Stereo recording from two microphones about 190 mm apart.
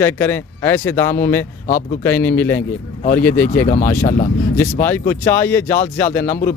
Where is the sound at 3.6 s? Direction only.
45° left (ahead or behind).